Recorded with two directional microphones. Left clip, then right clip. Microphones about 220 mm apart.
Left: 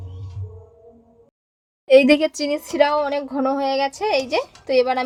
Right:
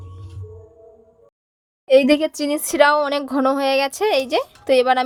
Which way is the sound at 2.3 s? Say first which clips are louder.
Right 1 dB; 15° right (ahead or behind).